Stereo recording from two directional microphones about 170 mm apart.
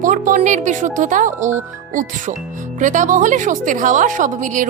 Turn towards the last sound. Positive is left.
turn(degrees=-50)  # may be behind; listen again after turning